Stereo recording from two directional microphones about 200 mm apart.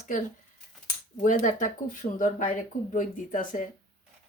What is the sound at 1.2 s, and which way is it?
Speech, 40° left (ahead or behind).